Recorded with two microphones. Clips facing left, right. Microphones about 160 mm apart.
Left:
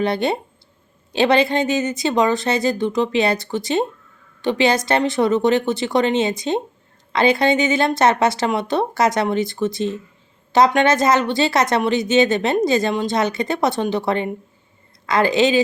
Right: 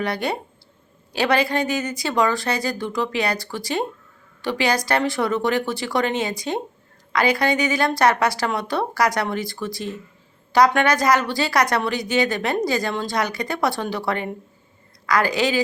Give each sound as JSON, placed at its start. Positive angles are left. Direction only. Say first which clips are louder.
{"t": 0.0, "sound": "speech", "louder": "left 5 dB", "side_deg": 25}